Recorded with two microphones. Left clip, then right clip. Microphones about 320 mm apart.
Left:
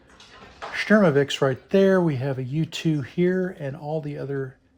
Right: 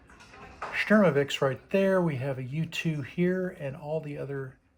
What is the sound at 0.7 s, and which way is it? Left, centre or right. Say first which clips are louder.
Speech: left 4 dB; left.